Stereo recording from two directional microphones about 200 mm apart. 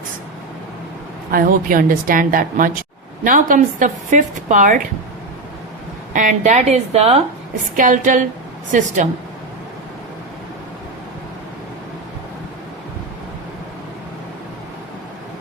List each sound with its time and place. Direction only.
1.3 s a woman's voice: 45° right (ahead or behind)
6.1 s a woman's voice: 40° right (ahead or behind)